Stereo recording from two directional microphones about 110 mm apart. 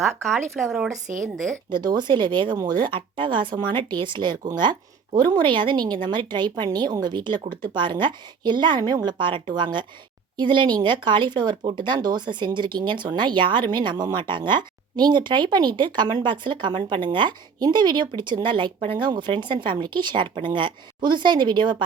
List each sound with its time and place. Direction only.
0.3 s speech: centre (ahead or behind)
1.7 s speech: 40° right (ahead or behind)